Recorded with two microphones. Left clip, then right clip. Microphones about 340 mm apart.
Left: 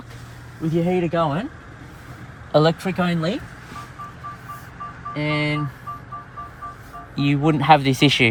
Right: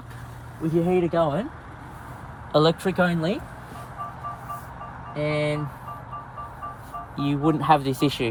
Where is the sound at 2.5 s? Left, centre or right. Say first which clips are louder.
Left 2 dB; left.